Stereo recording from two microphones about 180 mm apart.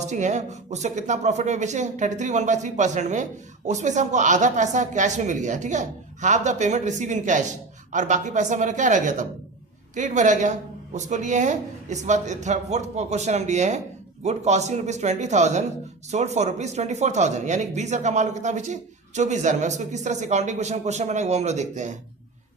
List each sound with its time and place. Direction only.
0.1 s speech: 40° right (ahead or behind)